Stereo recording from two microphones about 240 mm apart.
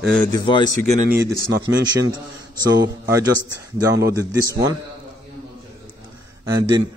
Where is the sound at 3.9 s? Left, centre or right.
Centre.